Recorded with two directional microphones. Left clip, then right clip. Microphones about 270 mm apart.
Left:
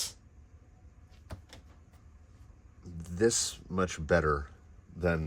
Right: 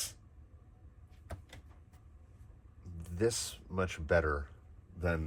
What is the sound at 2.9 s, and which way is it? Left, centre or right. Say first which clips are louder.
Speech: left 5 dB; left.